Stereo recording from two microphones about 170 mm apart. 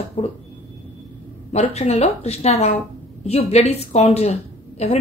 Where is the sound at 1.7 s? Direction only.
40° left (ahead or behind).